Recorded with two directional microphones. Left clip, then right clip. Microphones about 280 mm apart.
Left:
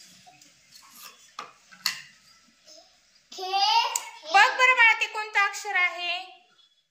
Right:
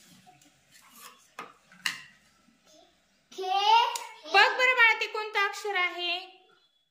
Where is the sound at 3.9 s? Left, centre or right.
Centre.